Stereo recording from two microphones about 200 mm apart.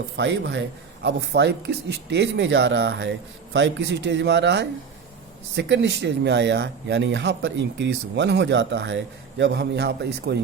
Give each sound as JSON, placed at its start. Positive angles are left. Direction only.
{"t": 0.2, "sound": "speech", "side_deg": -65}